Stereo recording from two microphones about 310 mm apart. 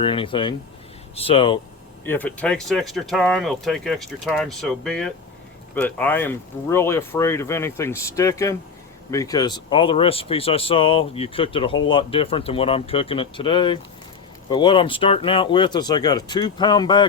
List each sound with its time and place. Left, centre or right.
0.0 s speech: centre
2.0 s speech: centre